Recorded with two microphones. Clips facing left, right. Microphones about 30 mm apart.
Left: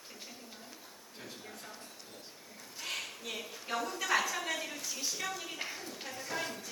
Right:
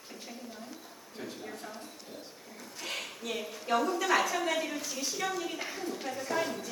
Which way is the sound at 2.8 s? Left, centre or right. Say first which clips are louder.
Right 2 dB; centre.